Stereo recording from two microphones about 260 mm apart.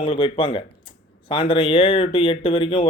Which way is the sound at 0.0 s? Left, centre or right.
Left.